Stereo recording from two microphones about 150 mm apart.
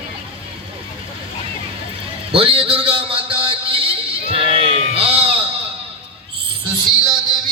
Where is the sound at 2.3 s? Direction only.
40° right (ahead or behind).